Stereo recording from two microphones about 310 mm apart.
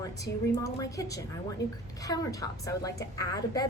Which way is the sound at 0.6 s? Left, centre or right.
Centre.